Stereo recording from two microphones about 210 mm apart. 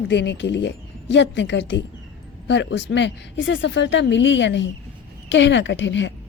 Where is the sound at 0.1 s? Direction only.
55° left (ahead or behind).